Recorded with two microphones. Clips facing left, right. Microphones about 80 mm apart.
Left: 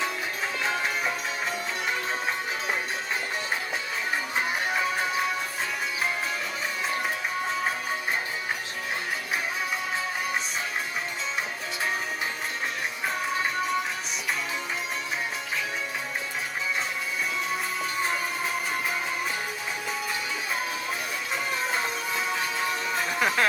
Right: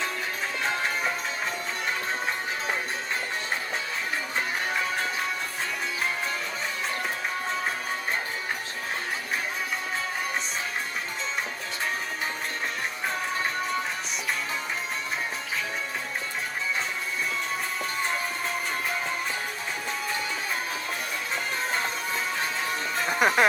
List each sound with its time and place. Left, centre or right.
0.6 s music: centre
4.4 s music: centre
18.0 s music: centre
23.2 s a sound: right